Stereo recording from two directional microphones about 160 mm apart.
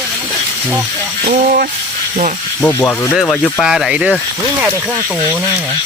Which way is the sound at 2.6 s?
15° left (ahead or behind).